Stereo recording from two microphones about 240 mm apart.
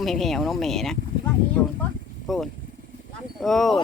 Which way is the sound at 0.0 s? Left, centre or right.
Centre.